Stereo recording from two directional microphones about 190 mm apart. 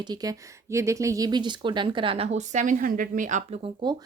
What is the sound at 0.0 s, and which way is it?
A woman's voice, 20° right (ahead or behind).